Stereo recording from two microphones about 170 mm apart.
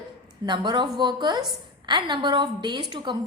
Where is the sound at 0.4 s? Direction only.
25° right (ahead or behind).